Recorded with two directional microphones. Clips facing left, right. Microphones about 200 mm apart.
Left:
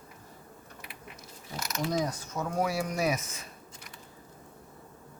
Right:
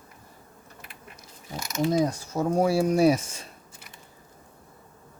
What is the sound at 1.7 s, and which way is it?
Mechanisms, 25° right (ahead or behind).